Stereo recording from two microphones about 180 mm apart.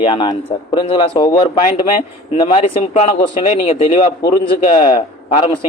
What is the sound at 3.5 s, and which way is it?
A man's voice, 35° left (ahead or behind).